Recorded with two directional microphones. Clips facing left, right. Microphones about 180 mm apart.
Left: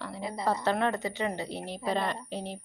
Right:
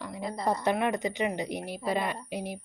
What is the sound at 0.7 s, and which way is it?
Speech, 15° right (ahead or behind).